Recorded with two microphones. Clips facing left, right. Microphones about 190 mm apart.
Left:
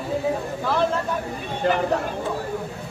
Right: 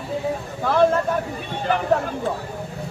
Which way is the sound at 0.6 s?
55° right (ahead or behind).